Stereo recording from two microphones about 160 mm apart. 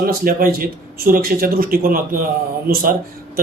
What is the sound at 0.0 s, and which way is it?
A man's voice, 70° right (ahead or behind).